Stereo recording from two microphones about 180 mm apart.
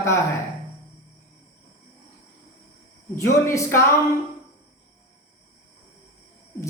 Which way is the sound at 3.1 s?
15° left (ahead or behind).